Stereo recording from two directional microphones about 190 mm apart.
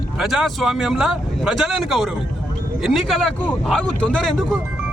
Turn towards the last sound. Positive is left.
turn(degrees=0)  # may be behind; listen again after turning